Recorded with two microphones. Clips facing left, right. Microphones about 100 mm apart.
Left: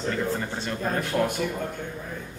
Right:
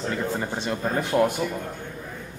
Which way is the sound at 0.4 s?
15° right (ahead or behind).